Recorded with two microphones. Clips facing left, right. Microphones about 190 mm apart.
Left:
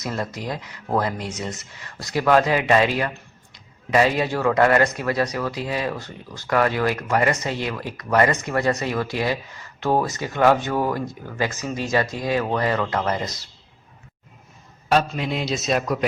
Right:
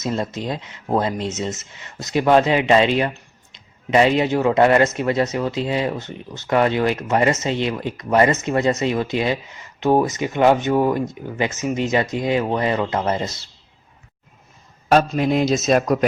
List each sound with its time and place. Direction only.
0.0 s speech: 25° right (ahead or behind)
14.8 s a man's voice: 45° right (ahead or behind)